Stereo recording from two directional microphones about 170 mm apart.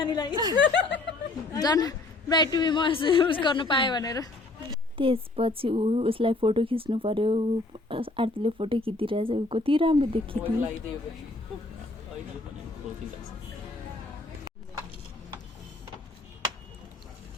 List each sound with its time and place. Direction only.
0.0 s a woman's voice: 25° left (ahead or behind)
0.3 s speech: 25° right (ahead or behind)
0.6 s speech: 90° left
1.5 s a woman's voice: 20° left (ahead or behind)
4.9 s speech: 30° right (ahead or behind)